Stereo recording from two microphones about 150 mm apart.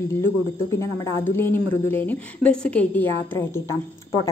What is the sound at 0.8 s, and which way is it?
Speech, 15° left (ahead or behind).